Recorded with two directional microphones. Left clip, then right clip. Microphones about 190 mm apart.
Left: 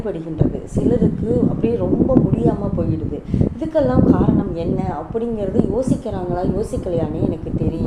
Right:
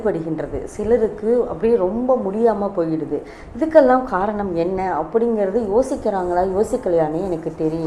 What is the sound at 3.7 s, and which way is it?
A woman's voice, 20° right (ahead or behind).